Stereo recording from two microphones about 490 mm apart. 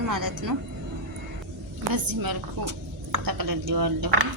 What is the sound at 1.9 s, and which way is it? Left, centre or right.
A woman's voice, right.